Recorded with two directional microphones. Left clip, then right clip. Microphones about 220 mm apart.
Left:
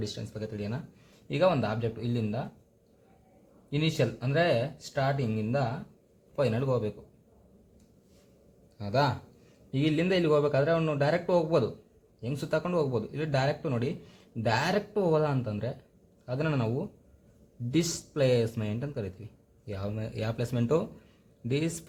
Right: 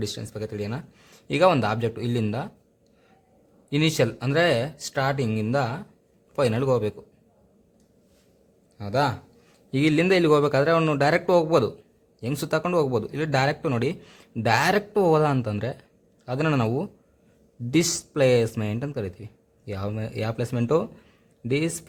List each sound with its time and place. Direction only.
0.0 s speech: 35° right (ahead or behind)
3.7 s speech: 40° right (ahead or behind)
8.8 s speech: 25° right (ahead or behind)